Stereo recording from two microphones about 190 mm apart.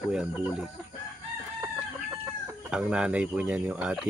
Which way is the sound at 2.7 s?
5° right (ahead or behind).